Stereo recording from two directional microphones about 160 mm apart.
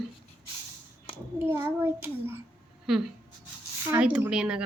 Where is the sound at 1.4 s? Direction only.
15° right (ahead or behind).